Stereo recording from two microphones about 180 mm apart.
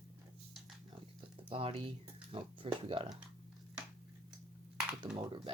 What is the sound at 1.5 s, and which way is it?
Speech, 30° right (ahead or behind).